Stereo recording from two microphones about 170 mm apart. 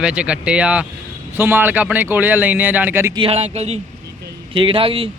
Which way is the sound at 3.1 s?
35° right (ahead or behind).